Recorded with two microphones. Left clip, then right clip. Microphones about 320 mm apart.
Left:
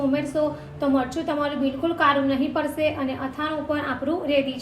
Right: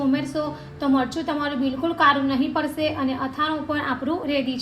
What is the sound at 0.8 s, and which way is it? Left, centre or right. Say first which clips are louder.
A woman's voice: right 1 dB; right.